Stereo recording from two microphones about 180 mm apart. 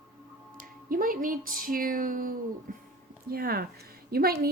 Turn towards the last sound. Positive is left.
turn(degrees=-55)  # may be behind; listen again after turning